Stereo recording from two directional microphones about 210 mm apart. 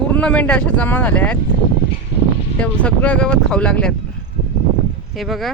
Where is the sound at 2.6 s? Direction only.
5° left (ahead or behind).